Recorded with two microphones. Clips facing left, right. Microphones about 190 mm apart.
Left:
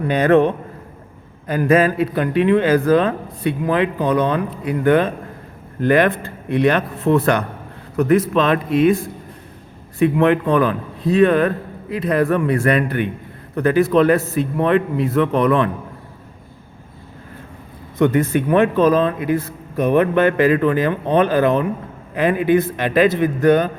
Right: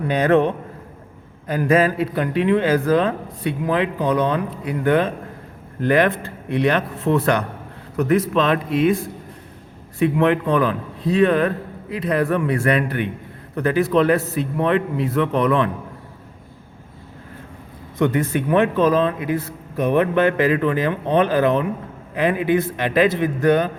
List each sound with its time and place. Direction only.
0.1 s speech: 55° left (ahead or behind)
10.0 s speech: 50° left (ahead or behind)
18.0 s speech: 50° left (ahead or behind)